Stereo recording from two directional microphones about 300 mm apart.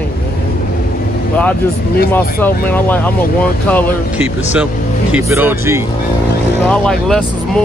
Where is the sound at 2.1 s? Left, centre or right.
Centre.